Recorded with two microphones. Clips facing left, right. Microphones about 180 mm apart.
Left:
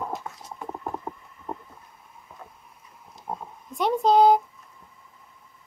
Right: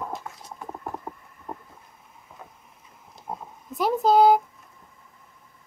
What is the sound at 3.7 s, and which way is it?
Speech, 5° right (ahead or behind).